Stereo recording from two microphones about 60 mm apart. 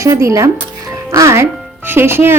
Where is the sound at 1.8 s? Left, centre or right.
Right.